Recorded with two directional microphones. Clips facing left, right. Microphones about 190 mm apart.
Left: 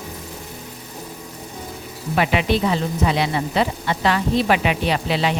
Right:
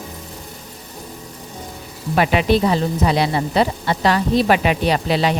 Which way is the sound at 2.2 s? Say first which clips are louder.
Right 3 dB; 40° right (ahead or behind).